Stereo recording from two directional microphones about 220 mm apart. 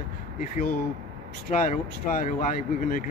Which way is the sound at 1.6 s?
35° left (ahead or behind).